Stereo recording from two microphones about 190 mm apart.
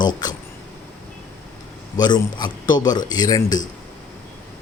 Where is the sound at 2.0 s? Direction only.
20° left (ahead or behind).